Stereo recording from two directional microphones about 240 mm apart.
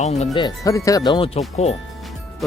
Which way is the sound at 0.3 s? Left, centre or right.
Centre.